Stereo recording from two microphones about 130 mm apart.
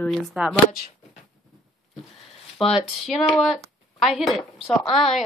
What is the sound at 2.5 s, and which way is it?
Speech, centre (ahead or behind).